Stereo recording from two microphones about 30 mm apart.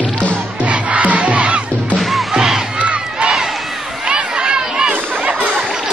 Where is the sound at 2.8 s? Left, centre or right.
Right.